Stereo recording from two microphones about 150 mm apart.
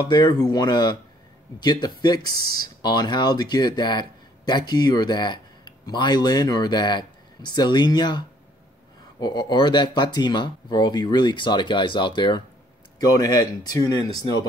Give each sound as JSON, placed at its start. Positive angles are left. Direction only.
{"t": 0.0, "sound": "speech", "side_deg": 30}